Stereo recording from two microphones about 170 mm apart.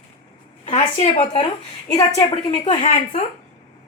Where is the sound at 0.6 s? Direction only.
45° left (ahead or behind).